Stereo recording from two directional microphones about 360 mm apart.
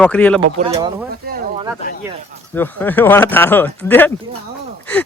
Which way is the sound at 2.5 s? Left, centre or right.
Centre.